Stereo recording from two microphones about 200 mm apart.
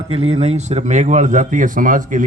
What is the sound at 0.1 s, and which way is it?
A man's voice, 30° right (ahead or behind).